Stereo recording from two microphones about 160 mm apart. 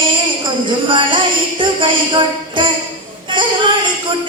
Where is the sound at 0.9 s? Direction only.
30° right (ahead or behind).